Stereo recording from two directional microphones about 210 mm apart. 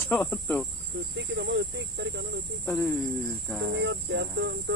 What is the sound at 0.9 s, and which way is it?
Speech, 60° right (ahead or behind).